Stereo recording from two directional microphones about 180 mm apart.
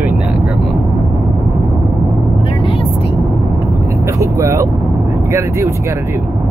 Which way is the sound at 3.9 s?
15° right (ahead or behind).